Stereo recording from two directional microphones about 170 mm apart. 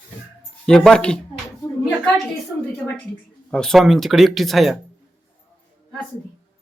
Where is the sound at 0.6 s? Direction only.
5° left (ahead or behind).